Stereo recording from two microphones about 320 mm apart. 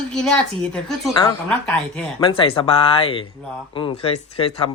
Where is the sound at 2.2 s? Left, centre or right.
Centre.